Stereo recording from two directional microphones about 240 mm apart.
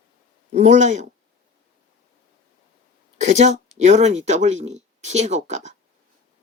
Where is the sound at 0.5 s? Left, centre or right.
Right.